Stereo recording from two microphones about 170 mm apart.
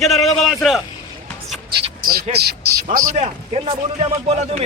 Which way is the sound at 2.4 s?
60° right (ahead or behind).